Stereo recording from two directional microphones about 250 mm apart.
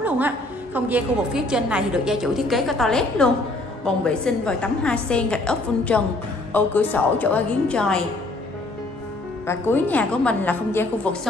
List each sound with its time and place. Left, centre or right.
0.7 s a woman's voice: centre
9.5 s a woman's voice: centre